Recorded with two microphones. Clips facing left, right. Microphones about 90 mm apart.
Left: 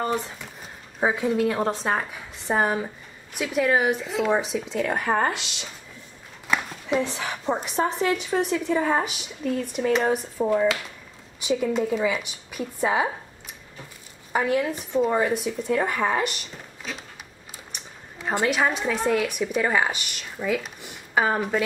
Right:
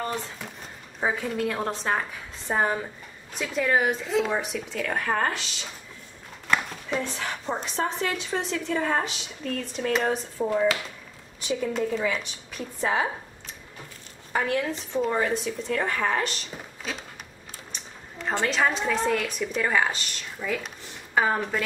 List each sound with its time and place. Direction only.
1.0 s speech: 15° left (ahead or behind)
4.3 s speech: 20° left (ahead or behind)
14.3 s speech: 10° left (ahead or behind)
17.7 s a woman's voice: 10° left (ahead or behind)